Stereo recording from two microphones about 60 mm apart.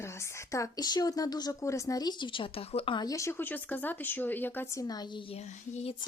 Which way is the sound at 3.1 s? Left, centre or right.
Left.